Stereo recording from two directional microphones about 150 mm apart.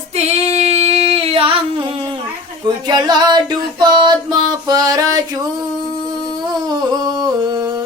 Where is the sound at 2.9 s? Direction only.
30° right (ahead or behind).